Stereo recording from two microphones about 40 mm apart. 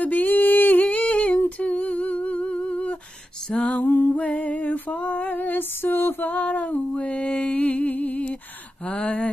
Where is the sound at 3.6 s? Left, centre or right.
Left.